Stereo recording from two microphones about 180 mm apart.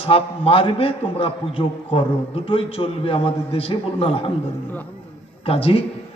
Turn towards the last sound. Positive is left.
turn(degrees=30)  # may be behind; listen again after turning